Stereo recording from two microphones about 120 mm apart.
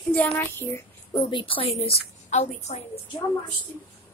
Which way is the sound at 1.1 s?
45° left (ahead or behind).